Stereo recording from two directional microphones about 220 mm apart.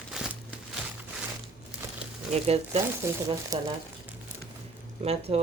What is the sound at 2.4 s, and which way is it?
Speech, 25° right (ahead or behind).